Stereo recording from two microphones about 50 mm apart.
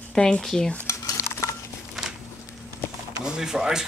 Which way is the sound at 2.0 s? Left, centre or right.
Centre.